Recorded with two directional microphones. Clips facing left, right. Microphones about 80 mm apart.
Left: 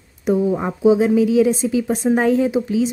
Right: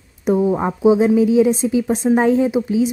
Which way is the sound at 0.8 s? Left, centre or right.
Right.